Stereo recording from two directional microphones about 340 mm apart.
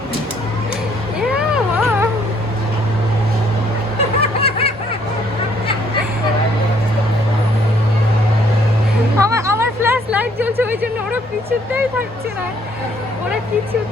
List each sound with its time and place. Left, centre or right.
1.3 s vehicle: centre
4.4 s snicker: centre
9.1 s music: centre
11.7 s a sound: centre